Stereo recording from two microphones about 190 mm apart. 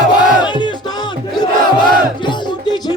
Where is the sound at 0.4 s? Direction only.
25° left (ahead or behind).